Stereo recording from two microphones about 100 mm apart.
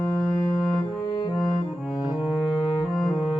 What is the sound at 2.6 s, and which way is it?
French horn, 65° left (ahead or behind).